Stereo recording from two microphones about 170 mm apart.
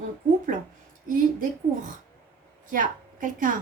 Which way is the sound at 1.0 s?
50° right (ahead or behind).